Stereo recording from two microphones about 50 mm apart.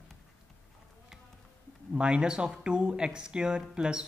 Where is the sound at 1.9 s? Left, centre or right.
Centre.